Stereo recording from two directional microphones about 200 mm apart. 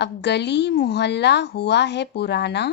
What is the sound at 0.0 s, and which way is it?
Speech, 60° left (ahead or behind).